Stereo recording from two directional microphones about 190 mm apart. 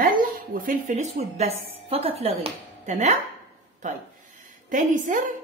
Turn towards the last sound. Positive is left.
turn(degrees=-40)  # may be behind; listen again after turning